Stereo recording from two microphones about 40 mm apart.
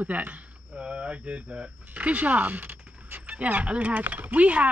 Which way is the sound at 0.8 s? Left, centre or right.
Right.